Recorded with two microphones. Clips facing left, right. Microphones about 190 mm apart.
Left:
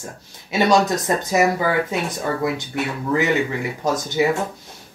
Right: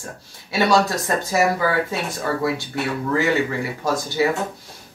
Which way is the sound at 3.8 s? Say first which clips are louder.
Left 1 dB; 20° left (ahead or behind).